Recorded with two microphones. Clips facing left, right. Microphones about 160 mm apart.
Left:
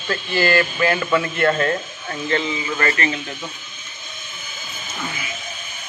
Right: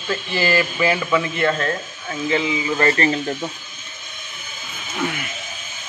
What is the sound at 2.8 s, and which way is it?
Speech, 35° right (ahead or behind).